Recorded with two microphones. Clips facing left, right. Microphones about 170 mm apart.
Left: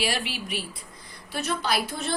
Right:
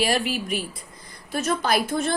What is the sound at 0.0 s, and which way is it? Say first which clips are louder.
A woman's voice: right 6 dB; 45° right (ahead or behind).